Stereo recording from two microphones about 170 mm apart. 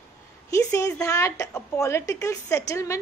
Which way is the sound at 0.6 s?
20° left (ahead or behind).